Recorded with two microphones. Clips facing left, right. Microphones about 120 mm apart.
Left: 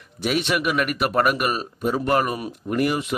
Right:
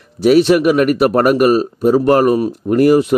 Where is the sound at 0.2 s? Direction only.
40° right (ahead or behind).